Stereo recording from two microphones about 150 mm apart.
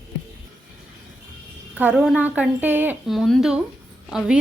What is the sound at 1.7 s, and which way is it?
A woman's voice, 5° right (ahead or behind).